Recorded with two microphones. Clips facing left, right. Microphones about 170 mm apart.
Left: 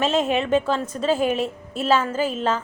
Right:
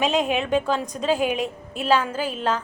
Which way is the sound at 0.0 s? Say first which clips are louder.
Left 1 dB; centre (ahead or behind).